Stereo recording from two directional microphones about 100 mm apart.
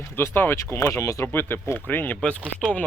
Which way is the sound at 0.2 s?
20° left (ahead or behind).